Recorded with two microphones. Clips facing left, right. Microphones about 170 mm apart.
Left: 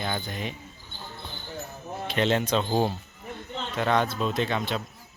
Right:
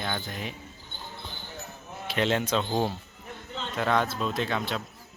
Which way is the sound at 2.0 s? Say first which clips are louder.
Left 2 dB; 5° right (ahead or behind).